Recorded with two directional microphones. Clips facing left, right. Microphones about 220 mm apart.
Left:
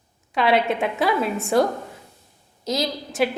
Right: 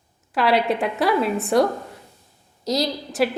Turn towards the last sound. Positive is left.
turn(degrees=0)  # may be behind; listen again after turning